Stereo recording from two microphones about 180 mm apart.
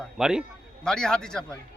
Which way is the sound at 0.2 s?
5° right (ahead or behind).